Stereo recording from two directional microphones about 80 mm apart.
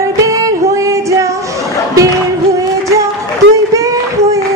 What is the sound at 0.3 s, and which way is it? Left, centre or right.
Music, right.